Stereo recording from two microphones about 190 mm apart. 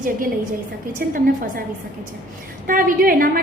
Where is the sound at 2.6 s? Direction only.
45° right (ahead or behind).